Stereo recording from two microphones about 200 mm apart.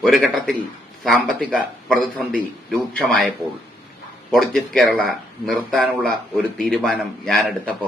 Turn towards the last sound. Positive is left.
turn(degrees=5)  # may be behind; listen again after turning